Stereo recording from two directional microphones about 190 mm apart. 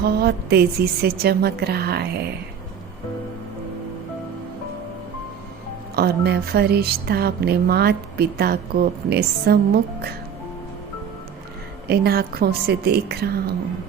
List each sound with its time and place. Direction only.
0.0 s speech: 55° right (ahead or behind)
6.0 s speech: 55° right (ahead or behind)
11.9 s speech: 55° right (ahead or behind)